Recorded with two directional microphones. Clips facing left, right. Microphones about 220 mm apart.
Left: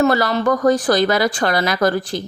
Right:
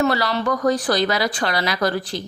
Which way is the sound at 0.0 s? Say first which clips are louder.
Left 4 dB; 45° left (ahead or behind).